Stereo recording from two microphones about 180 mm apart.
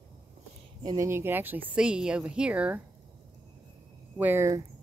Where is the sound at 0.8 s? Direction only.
20° right (ahead or behind).